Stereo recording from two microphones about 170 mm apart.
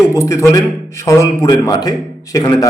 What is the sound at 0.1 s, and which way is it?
A man's voice, 15° left (ahead or behind).